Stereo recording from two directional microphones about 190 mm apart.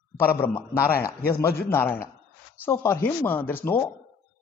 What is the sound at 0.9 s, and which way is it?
Speech, 50° left (ahead or behind).